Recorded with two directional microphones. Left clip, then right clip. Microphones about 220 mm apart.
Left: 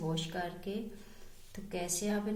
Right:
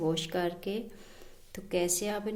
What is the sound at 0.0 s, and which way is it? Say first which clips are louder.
Speech: right 7 dB; 45° right (ahead or behind).